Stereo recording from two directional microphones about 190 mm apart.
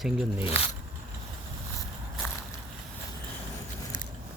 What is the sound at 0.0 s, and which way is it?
Speech, centre (ahead or behind).